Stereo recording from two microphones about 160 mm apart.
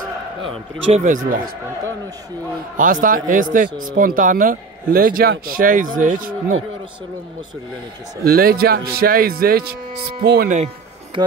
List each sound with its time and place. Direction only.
0.9 s speech: 55° right (ahead or behind)
2.8 s speech: 60° right (ahead or behind)
8.2 s speech: 65° right (ahead or behind)
11.1 s speech: 30° right (ahead or behind)